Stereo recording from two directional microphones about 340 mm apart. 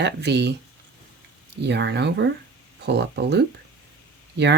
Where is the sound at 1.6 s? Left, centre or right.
Right.